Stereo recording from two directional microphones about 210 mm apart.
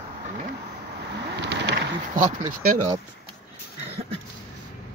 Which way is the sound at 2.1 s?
40° right (ahead or behind).